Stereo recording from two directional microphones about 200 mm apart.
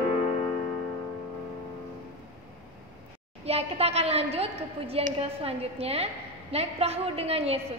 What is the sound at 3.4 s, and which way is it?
A woman's voice, 30° right (ahead or behind).